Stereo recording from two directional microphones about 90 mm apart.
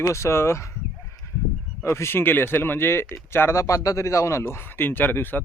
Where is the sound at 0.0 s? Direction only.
35° left (ahead or behind).